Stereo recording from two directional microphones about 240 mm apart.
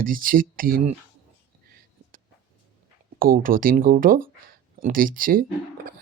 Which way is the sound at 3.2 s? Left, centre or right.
Right.